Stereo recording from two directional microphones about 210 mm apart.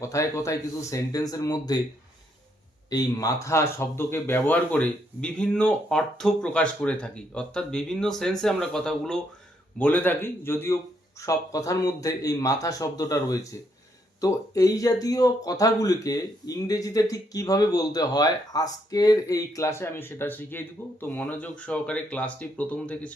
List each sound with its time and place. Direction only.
0.0 s speech: 15° left (ahead or behind)
2.9 s speech: 15° left (ahead or behind)